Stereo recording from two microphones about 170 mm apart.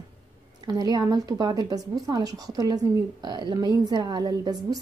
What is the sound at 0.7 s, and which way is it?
A woman's voice, 25° right (ahead or behind).